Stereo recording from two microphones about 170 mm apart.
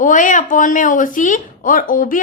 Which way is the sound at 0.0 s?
50° left (ahead or behind).